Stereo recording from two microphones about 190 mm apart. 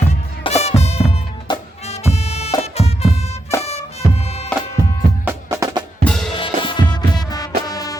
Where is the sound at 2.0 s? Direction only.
35° left (ahead or behind).